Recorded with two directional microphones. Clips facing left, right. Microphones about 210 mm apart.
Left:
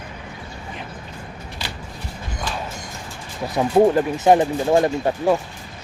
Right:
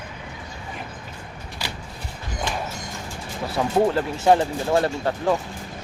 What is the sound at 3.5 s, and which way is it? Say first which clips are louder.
Speech: left 5 dB; 20° left (ahead or behind).